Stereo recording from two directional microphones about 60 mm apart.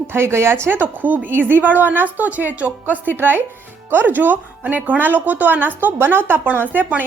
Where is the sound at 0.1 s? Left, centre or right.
Right.